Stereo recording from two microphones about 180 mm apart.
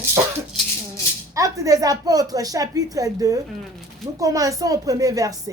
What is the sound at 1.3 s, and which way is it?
A woman's voice, 20° right (ahead or behind).